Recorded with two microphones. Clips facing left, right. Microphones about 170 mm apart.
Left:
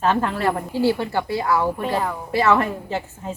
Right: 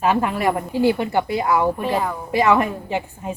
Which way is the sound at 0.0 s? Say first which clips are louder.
Right 1 dB; 10° right (ahead or behind).